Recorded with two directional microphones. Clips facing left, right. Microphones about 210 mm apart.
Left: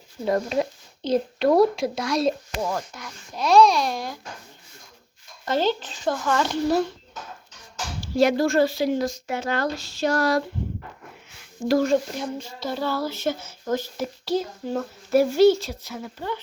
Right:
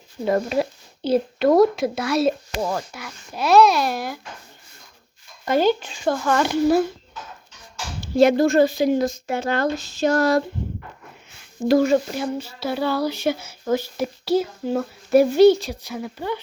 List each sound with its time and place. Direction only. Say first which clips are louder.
0.3 s speech: right 2 dB; 5° right (ahead or behind)
5.5 s speech: right 4 dB; 10° right (ahead or behind)
8.0 s speech: right 4 dB; 25° right (ahead or behind)
11.8 s speech: right 3 dB; 5° right (ahead or behind)